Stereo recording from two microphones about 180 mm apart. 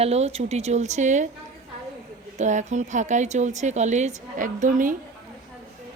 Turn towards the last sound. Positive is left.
turn(degrees=-45)  # may be behind; listen again after turning